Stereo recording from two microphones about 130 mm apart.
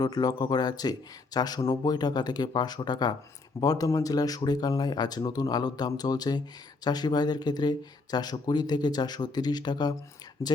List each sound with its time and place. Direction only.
0.0 s speech: 30° left (ahead or behind)